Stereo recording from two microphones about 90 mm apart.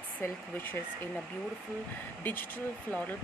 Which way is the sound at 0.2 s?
20° left (ahead or behind).